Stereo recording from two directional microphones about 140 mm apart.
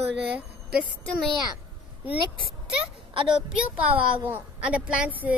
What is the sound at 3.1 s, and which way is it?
Speech, 40° right (ahead or behind).